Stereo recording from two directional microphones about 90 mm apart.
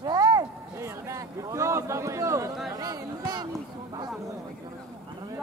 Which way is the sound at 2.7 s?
45° right (ahead or behind).